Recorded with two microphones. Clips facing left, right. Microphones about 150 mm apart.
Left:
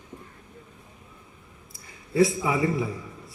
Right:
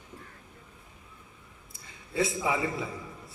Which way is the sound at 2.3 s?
30° right (ahead or behind).